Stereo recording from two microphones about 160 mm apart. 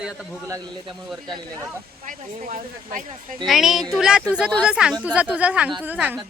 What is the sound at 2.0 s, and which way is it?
Speech, 55° right (ahead or behind).